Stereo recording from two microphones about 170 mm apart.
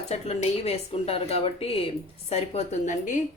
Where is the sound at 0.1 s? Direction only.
40° left (ahead or behind).